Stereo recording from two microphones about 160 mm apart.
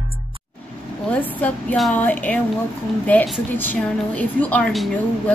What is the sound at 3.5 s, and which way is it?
A woman's voice, 10° left (ahead or behind).